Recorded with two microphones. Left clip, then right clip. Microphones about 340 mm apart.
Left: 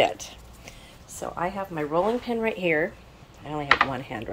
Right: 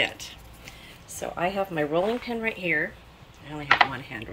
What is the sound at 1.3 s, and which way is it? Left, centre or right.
Speech, centre.